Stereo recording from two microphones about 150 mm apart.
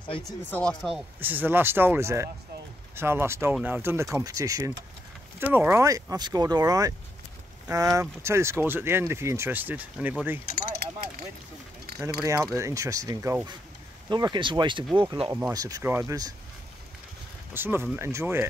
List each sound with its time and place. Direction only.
0.2 s speech: 5° left (ahead or behind)
1.2 s speech: 15° right (ahead or behind)
10.5 s a sound: 90° right
12.0 s speech: 25° right (ahead or behind)
14.0 s speech: 30° right (ahead or behind)
17.6 s speech: 15° right (ahead or behind)